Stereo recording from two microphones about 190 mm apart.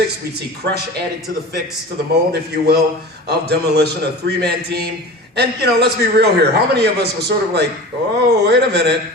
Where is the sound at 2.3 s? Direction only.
55° right (ahead or behind).